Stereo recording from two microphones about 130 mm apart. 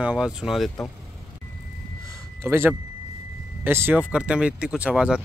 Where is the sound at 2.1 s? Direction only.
20° right (ahead or behind).